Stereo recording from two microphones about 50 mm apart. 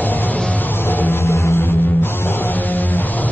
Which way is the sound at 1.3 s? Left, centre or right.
Left.